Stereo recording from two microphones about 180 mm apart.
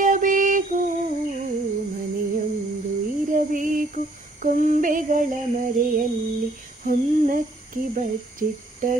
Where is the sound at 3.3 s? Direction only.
45° right (ahead or behind).